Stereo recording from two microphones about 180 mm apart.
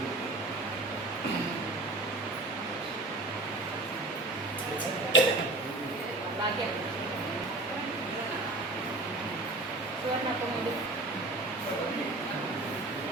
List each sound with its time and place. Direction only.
5.1 s tick-tock: 90° left